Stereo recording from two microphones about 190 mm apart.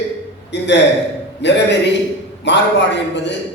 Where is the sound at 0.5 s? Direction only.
65° left (ahead or behind).